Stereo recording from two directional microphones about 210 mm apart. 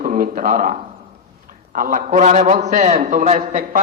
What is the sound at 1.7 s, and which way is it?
A man's voice, 40° right (ahead or behind).